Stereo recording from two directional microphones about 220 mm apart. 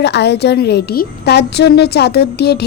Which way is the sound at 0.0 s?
50° left (ahead or behind).